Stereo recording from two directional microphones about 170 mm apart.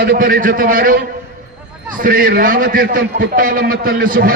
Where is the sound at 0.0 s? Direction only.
65° right (ahead or behind).